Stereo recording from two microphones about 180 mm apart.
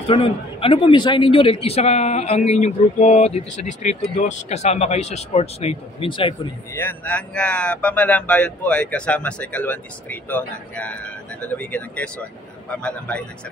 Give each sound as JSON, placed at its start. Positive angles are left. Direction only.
{"t": 0.1, "sound": "a man's voice", "side_deg": 30}
{"t": 6.7, "sound": "speech", "side_deg": 10}